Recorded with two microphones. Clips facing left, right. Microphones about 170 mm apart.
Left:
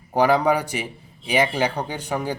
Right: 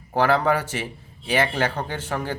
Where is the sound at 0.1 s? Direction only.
15° left (ahead or behind).